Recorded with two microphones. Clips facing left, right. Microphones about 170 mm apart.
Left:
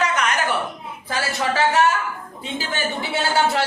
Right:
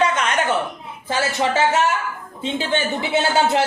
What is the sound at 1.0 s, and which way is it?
A man's voice, 25° right (ahead or behind).